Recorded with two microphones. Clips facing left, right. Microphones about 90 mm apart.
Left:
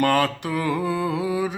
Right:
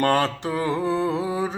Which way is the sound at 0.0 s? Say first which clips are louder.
Even; 30° right (ahead or behind).